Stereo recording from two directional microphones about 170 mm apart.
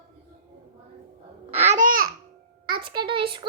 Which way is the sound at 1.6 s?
55° right (ahead or behind).